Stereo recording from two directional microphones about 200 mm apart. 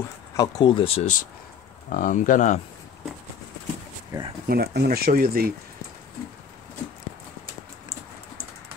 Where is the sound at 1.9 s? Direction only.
45° left (ahead or behind).